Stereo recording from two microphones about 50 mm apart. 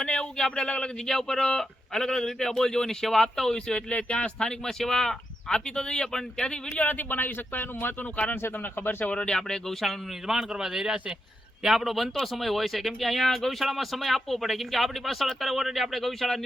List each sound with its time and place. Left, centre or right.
0.0 s speech: centre
4.4 s speech: centre
6.7 s speech: left
8.1 s speech: left
8.5 s speech: left
9.1 s speech: centre
9.8 s speech: centre